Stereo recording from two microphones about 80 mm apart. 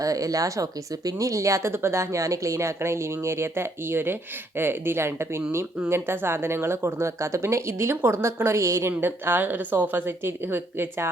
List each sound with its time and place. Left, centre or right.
0.0 s speech: right
8.9 s a woman's voice: right